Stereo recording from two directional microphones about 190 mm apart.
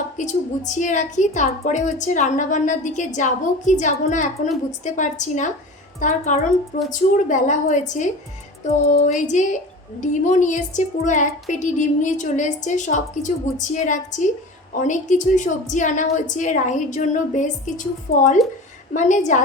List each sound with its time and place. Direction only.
0.2 s a woman's voice: 40° left (ahead or behind)
18.1 s speech: 50° left (ahead or behind)
18.9 s a woman's voice: 40° left (ahead or behind)